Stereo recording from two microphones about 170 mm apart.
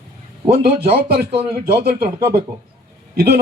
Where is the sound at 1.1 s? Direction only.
70° right (ahead or behind).